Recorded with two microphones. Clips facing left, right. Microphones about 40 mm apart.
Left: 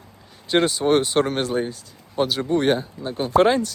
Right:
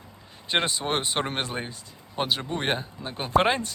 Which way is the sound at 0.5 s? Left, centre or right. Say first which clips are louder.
Left 8 dB; right.